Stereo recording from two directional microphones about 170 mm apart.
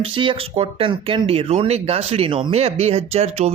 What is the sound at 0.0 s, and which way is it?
Speech, 30° right (ahead or behind).